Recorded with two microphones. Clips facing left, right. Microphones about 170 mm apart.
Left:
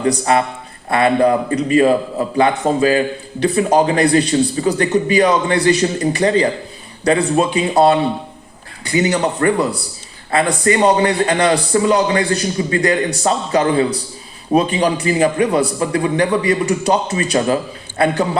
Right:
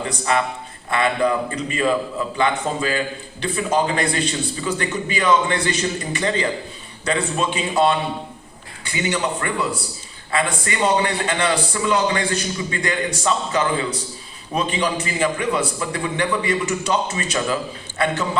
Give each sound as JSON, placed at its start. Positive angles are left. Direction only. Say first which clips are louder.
{"t": 0.0, "sound": "a man's voice", "louder": "left 6 dB", "side_deg": 40}